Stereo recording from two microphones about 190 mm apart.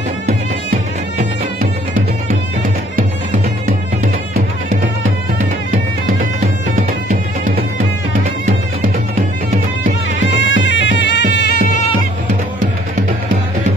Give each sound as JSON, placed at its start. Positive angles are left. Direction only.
{"t": 10.4, "sound": "bagpipes", "side_deg": 75}